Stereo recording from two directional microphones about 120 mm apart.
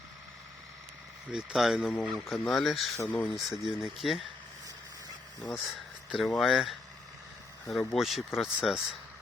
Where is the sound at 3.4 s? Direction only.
Centre (ahead or behind).